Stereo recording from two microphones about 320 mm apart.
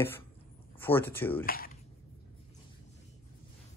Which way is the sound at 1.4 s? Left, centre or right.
Left.